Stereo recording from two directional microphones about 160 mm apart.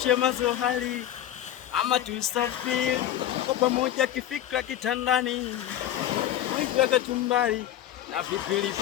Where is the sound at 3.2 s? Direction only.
40° right (ahead or behind).